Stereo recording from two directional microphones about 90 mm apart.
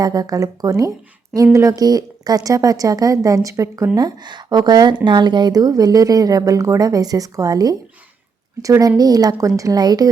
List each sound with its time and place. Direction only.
0.0 s a woman's voice: 45° right (ahead or behind)
3.9 s a woman's voice: 50° right (ahead or behind)